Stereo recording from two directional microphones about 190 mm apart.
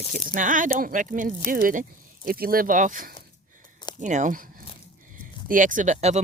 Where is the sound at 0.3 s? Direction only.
45° right (ahead or behind).